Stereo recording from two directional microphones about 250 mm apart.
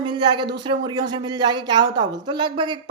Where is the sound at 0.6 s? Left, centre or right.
Centre.